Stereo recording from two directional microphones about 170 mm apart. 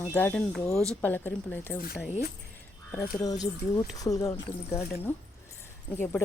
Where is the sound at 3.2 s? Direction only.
20° left (ahead or behind).